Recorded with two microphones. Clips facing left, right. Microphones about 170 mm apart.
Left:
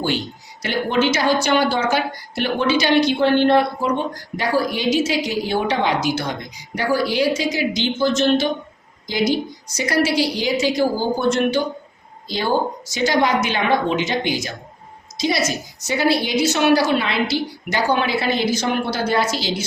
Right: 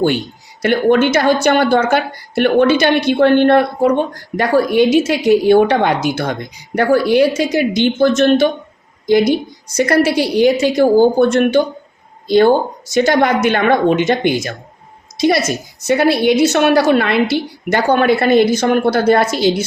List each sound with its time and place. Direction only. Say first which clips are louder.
0.6 s a woman's voice: right 7 dB; 55° right (ahead or behind)
15.2 s a woman's voice: right 7 dB; 50° right (ahead or behind)